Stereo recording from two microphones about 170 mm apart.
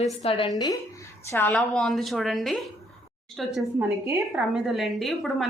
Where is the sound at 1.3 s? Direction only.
10° left (ahead or behind).